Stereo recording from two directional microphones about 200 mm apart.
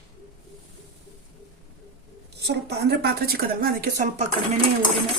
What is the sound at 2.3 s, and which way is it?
A woman's voice, 55° right (ahead or behind).